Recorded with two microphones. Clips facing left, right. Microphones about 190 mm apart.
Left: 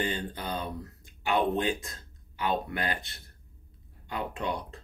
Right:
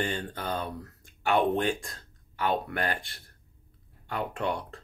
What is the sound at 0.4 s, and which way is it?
Speech, 15° left (ahead or behind).